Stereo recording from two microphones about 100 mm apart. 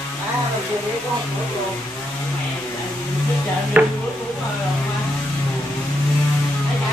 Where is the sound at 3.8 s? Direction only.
20° right (ahead or behind).